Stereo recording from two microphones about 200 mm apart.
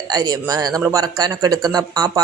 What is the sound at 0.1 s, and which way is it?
A man's voice, 20° right (ahead or behind).